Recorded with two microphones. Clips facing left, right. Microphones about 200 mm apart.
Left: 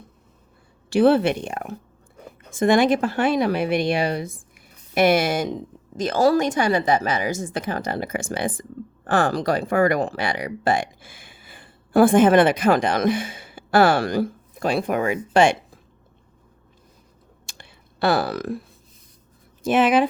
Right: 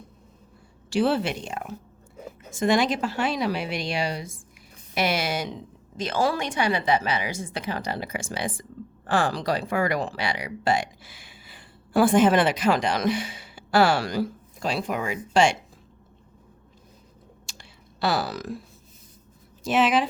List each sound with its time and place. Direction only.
0.9 s speech: 55° left (ahead or behind)
2.1 s a sound: 5° right (ahead or behind)
2.5 s speech: 55° left (ahead or behind)
17.4 s clicking: 55° left (ahead or behind)
19.6 s speech: 55° left (ahead or behind)